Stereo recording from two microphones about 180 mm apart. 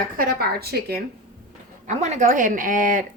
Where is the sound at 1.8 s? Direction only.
45° right (ahead or behind).